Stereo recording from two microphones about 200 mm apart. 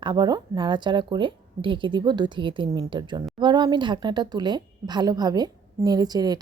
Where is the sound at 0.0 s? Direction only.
20° right (ahead or behind).